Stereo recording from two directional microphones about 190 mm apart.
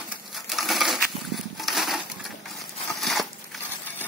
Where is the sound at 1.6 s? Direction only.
Centre (ahead or behind).